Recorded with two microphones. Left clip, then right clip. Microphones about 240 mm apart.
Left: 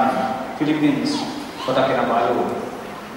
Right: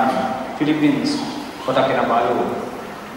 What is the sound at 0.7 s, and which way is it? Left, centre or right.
A man's voice, centre.